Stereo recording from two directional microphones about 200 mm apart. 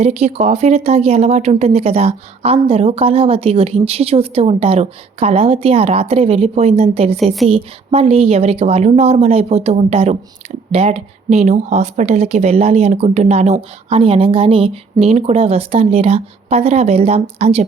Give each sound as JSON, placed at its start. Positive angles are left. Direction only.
{"t": 0.0, "sound": "speech", "side_deg": -35}